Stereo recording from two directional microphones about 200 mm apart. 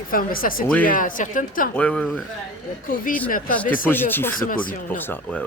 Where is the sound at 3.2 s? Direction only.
45° left (ahead or behind).